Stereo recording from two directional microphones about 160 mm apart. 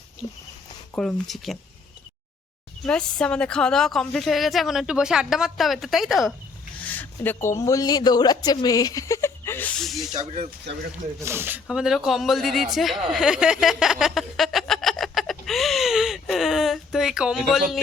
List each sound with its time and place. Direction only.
0.9 s a woman's voice: centre (ahead or behind)
2.8 s a woman's voice: 5° left (ahead or behind)
6.8 s speech: 10° left (ahead or behind)
11.2 s a woman's voice: 15° right (ahead or behind); by 12.6 s centre (ahead or behind)
12.7 s a sound: centre (ahead or behind)